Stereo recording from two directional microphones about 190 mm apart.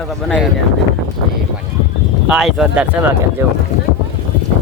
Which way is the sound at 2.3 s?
Centre (ahead or behind).